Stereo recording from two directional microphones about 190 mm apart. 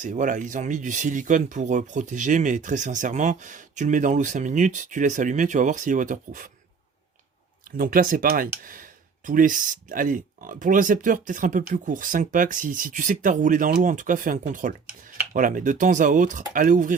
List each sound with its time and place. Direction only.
0.0 s speech: 40° right (ahead or behind)
7.8 s speech: 50° right (ahead or behind)